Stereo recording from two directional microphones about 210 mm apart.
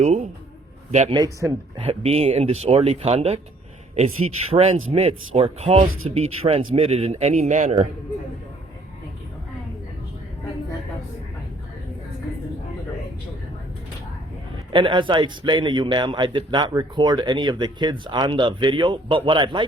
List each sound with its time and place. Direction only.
0.0 s a man's voice: 30° right (ahead or behind)
1.1 s a man's voice: 15° right (ahead or behind)
1.9 s a man's voice: 30° right (ahead or behind)
4.5 s a man's voice: 30° right (ahead or behind)
14.7 s a man's voice: 25° right (ahead or behind)